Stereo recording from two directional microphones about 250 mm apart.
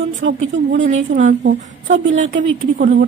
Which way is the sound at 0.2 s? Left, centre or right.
Right.